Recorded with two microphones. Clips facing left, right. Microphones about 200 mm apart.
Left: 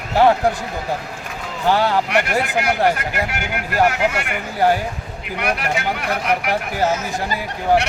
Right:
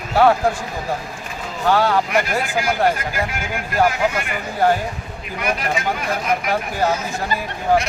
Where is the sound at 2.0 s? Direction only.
70° left (ahead or behind).